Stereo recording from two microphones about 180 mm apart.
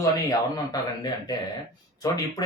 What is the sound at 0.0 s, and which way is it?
A man's voice, 20° left (ahead or behind).